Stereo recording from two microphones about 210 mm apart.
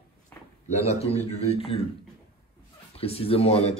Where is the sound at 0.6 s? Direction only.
30° left (ahead or behind).